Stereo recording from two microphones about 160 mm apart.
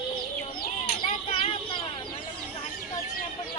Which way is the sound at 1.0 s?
30° left (ahead or behind).